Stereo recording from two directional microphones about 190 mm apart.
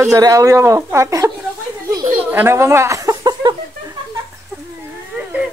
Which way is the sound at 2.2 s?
10° right (ahead or behind).